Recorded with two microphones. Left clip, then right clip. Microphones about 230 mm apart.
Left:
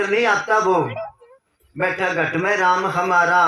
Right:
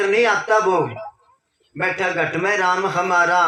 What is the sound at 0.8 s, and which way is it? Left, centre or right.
Speech, left.